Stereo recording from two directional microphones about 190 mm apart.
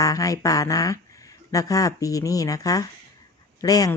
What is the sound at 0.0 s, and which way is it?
Speech, 20° left (ahead or behind).